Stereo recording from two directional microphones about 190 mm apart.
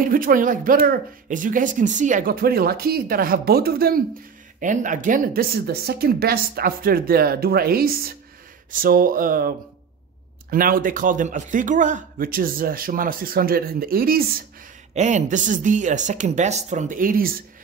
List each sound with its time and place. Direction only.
0.0 s speech: 45° right (ahead or behind)
10.5 s speech: 45° right (ahead or behind)
15.0 s speech: 40° right (ahead or behind)